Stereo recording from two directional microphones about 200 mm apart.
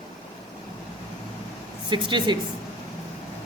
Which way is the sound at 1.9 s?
25° right (ahead or behind).